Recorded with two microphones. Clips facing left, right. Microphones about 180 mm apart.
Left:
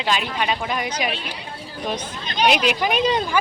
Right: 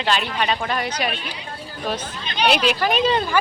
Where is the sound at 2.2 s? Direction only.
45° left (ahead or behind).